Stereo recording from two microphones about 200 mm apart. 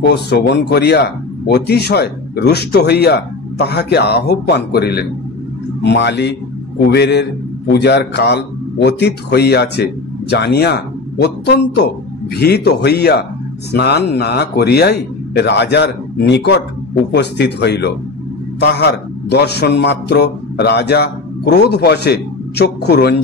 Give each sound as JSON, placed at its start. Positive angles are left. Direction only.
{"t": 0.0, "sound": "speech", "side_deg": 55}